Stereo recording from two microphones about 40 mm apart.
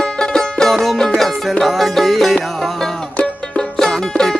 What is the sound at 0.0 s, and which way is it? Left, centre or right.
Music, centre.